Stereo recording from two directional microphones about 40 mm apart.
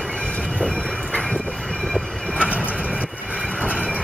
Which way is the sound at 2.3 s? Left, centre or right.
Right.